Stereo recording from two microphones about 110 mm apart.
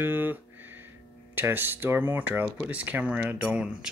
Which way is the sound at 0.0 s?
20° right (ahead or behind).